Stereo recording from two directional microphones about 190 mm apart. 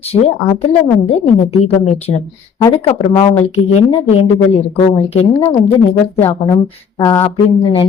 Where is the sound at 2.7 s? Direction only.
20° left (ahead or behind).